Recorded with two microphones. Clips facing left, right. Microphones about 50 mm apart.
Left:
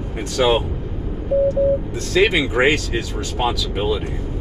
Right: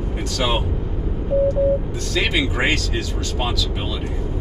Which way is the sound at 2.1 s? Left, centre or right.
Centre.